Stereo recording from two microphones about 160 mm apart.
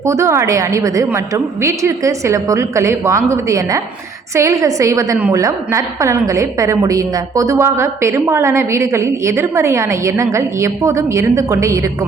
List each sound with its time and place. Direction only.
0.0 s a woman's voice: 20° right (ahead or behind)